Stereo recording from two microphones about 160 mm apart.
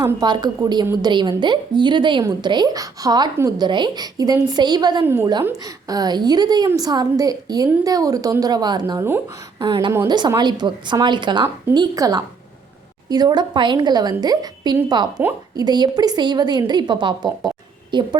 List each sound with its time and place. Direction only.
0.0 s a woman's voice: 25° right (ahead or behind)
5.0 s a woman's voice: 15° right (ahead or behind)
9.9 s a woman's voice: 15° right (ahead or behind)
10.2 s a woman's voice: 25° right (ahead or behind)